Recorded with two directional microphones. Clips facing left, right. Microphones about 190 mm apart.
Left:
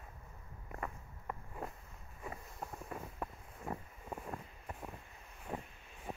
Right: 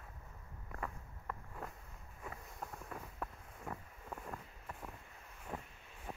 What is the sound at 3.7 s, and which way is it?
Wind, 30° left (ahead or behind).